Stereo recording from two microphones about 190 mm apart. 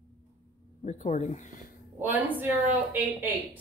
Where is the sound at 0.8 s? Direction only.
35° left (ahead or behind).